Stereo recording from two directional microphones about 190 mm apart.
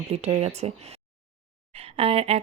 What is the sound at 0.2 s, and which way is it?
Speech, 35° right (ahead or behind).